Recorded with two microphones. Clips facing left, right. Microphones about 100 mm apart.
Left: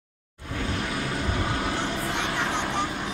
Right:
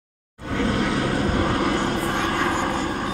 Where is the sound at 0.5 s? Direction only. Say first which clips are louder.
Right 8 dB; 85° right.